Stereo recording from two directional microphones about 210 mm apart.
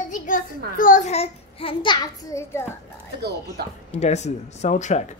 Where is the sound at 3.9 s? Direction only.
30° left (ahead or behind).